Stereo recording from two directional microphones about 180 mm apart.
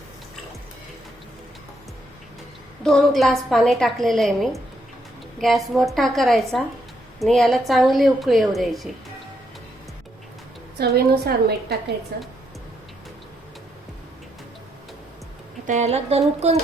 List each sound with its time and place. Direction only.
2.8 s a woman's voice: centre (ahead or behind)
10.8 s a woman's voice: 60° right (ahead or behind)
15.6 s speech: 40° right (ahead or behind)